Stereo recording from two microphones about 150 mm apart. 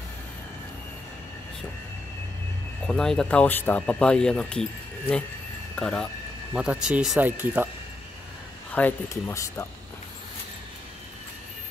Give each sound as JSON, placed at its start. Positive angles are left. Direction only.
{"t": 2.9, "sound": "speech", "side_deg": 5}
{"t": 6.5, "sound": "speech", "side_deg": -5}
{"t": 8.7, "sound": "speech", "side_deg": 15}